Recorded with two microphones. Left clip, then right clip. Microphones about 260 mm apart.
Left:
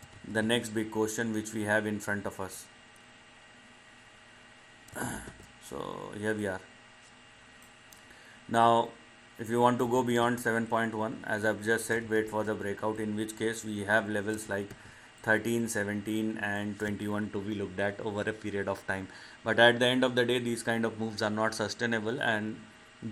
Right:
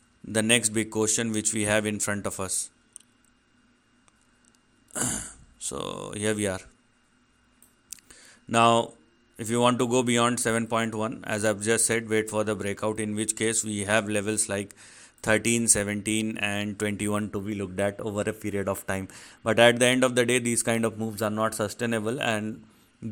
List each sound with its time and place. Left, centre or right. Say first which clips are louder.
0.3 s speech: right 6 dB; right
4.9 s a sound: right 5 dB; right
5.6 s speech: right 5 dB; right
8.5 s speech: right 3 dB; right